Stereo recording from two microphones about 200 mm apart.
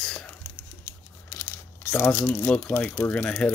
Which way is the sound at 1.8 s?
10° left (ahead or behind).